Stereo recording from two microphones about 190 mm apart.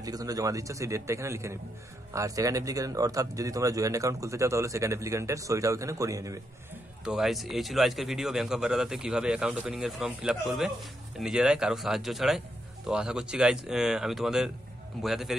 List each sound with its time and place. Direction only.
0.0 s speech: 20° right (ahead or behind)
7.1 s a man's voice: centre (ahead or behind)